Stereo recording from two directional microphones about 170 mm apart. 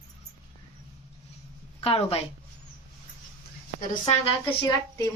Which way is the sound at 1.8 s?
35° left (ahead or behind).